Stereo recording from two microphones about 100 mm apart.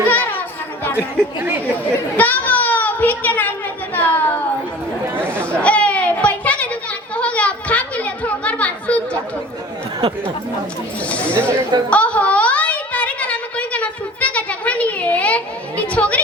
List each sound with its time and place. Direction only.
0.1 s chatter: 15° left (ahead or behind)
2.1 s a child's voice: 15° left (ahead or behind)
5.5 s a sound: 15° left (ahead or behind)
11.1 s speech: 15° left (ahead or behind)
11.9 s a sound: 15° left (ahead or behind)
15.9 s speech: 15° left (ahead or behind)